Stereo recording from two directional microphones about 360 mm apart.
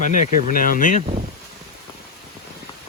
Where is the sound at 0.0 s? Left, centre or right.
Left.